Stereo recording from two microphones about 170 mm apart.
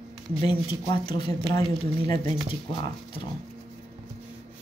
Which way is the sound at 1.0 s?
30° left (ahead or behind).